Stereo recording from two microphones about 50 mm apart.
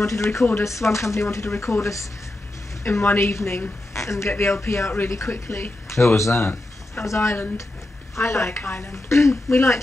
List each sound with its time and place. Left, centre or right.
0.0 s speech: left
2.8 s speech: left
3.9 s a sound: left
4.3 s speech: left